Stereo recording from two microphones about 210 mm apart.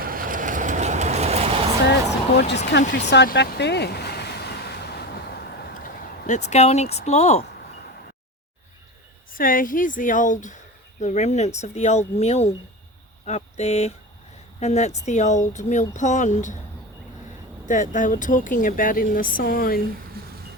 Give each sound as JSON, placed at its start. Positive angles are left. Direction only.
{"t": 0.0, "sound": "vehicle", "side_deg": -40}
{"t": 2.3, "sound": "speech", "side_deg": 50}
{"t": 3.1, "sound": "a sound", "side_deg": 55}
{"t": 6.5, "sound": "speech", "side_deg": 30}
{"t": 9.3, "sound": "speech", "side_deg": 40}
{"t": 17.7, "sound": "speech", "side_deg": 35}
{"t": 20.2, "sound": "a sound", "side_deg": -45}